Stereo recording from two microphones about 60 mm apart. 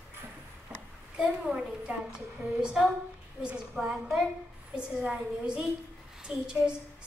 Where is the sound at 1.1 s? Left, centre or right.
Centre.